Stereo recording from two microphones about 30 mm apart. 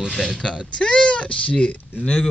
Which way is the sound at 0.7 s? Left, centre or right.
Left.